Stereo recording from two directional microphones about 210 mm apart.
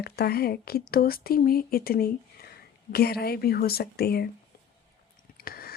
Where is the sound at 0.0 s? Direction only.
50° left (ahead or behind).